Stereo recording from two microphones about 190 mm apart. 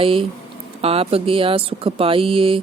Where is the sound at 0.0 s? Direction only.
30° right (ahead or behind).